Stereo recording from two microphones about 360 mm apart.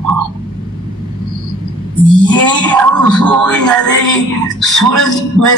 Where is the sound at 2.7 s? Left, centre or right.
Centre.